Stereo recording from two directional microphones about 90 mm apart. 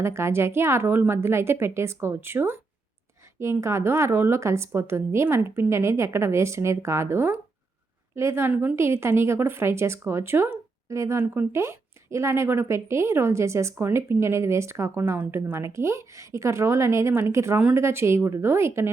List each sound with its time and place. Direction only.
0.0 s a woman's voice: 30° right (ahead or behind)